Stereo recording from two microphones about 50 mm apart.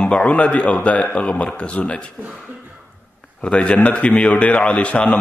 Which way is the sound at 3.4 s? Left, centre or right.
Centre.